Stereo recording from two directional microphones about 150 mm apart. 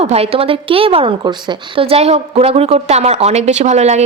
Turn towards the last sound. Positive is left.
turn(degrees=-50)  # may be behind; listen again after turning